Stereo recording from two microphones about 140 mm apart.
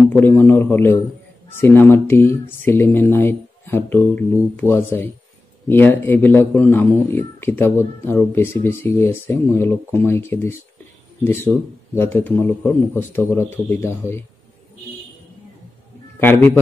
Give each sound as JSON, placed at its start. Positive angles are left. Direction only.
{"t": 0.2, "sound": "speech", "side_deg": 15}